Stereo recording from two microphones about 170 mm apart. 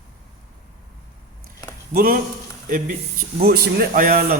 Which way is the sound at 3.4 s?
70° right (ahead or behind).